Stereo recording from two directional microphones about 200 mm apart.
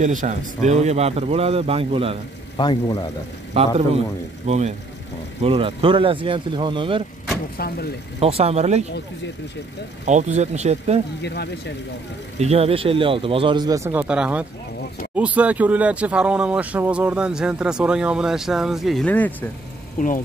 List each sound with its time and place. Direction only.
0.0 s speech: 40° right (ahead or behind)
2.5 s speech: 20° left (ahead or behind)
3.5 s speech: 30° right (ahead or behind)
7.5 s speech: 50° left (ahead or behind)
8.2 s speech: 30° right (ahead or behind)
10.0 s speech: 35° right (ahead or behind)
11.2 s speech: 55° left (ahead or behind)
12.4 s speech: 30° right (ahead or behind); by 19.3 s 10° left (ahead or behind)